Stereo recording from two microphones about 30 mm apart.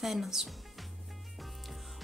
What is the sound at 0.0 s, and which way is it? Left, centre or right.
Speech, centre.